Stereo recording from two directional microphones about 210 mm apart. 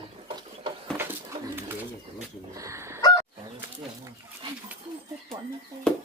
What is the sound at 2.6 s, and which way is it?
Chicken, 15° right (ahead or behind).